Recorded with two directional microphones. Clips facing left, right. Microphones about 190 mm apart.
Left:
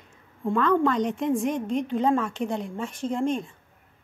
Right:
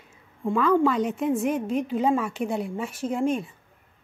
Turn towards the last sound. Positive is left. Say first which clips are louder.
# right 1 dB
turn(degrees=-5)  # may be behind; listen again after turning